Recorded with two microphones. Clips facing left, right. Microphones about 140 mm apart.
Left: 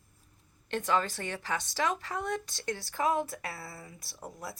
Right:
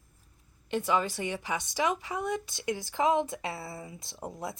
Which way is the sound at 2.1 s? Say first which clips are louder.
Right 2 dB; centre (ahead or behind).